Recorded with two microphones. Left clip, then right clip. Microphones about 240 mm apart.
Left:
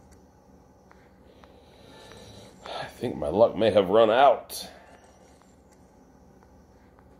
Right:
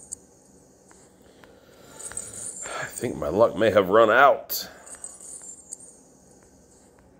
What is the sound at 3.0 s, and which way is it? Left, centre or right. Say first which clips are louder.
Speech: right 1 dB; centre.